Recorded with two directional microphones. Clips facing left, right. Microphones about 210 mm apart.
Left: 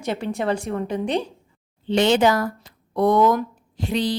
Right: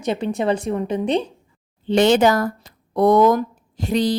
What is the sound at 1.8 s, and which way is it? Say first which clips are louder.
Speech: right 3 dB; 45° right (ahead or behind).